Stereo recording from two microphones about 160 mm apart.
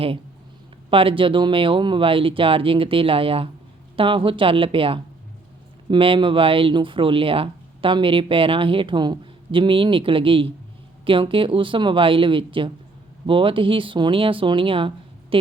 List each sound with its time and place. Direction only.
0.9 s speech: 35° right (ahead or behind)